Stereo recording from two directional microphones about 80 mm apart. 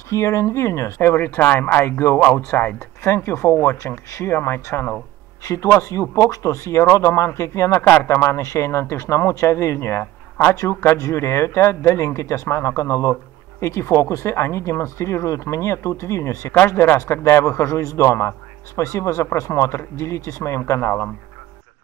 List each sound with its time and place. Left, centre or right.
0.1 s speech: left
3.0 s speech: left